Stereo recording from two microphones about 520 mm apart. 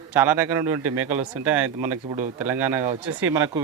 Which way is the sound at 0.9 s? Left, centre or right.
Right.